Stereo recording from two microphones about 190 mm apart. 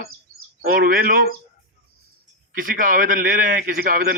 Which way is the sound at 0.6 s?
50° right (ahead or behind).